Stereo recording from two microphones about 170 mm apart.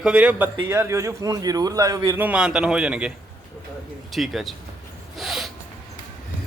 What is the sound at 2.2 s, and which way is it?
Speech, 5° right (ahead or behind).